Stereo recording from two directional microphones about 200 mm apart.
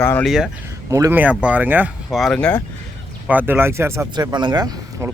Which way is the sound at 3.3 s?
10° right (ahead or behind).